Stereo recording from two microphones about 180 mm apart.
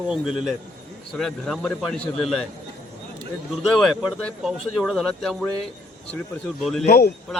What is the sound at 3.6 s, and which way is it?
A man's voice, centre (ahead or behind).